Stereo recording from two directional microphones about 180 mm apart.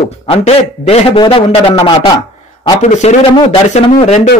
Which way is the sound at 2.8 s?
40° left (ahead or behind).